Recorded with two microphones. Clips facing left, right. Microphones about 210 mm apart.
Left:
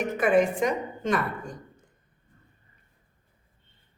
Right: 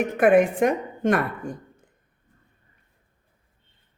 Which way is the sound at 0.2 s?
55° right (ahead or behind).